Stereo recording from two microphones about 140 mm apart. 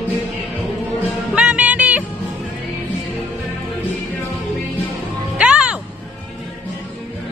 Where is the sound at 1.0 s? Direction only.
5° right (ahead or behind).